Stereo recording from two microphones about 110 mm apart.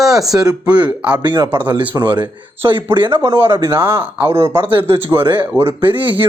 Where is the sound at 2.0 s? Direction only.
45° right (ahead or behind).